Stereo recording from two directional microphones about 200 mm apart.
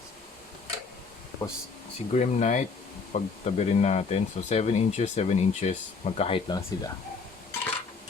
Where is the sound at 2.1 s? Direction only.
35° left (ahead or behind).